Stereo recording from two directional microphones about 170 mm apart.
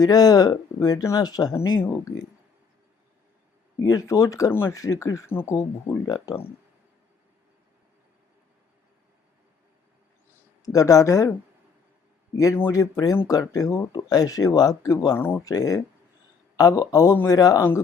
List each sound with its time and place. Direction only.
0.0 s speech: 20° left (ahead or behind)
3.8 s speech: 20° left (ahead or behind)
10.7 s speech: 20° left (ahead or behind)
12.4 s speech: 15° left (ahead or behind)